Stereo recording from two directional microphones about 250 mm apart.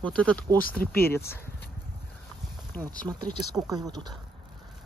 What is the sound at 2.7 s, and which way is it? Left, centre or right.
Speech, centre.